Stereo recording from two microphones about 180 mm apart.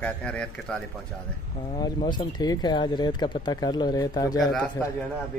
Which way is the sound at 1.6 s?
25° left (ahead or behind).